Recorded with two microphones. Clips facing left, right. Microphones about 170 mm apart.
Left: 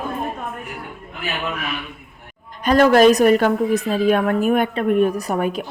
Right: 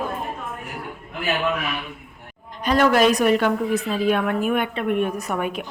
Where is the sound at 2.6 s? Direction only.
45° left (ahead or behind).